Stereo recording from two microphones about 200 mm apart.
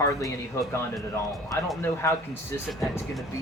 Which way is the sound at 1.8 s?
10° left (ahead or behind).